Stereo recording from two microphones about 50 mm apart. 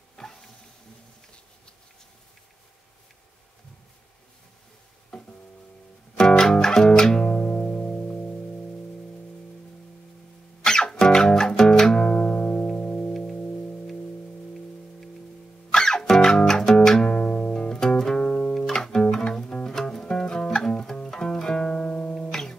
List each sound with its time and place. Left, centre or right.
0.1 s a sound: centre
6.1 s music: centre; by 8.4 s left
10.6 s music: centre
12.1 s music: left
15.7 s music: centre
17.2 s music: left